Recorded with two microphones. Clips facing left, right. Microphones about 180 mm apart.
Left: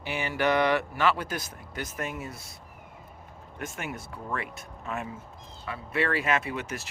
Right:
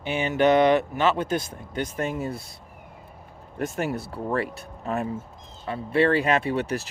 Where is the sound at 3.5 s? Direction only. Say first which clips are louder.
Right 9 dB; 35° right (ahead or behind).